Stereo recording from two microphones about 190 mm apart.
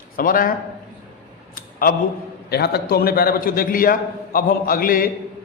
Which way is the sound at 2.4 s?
55° left (ahead or behind).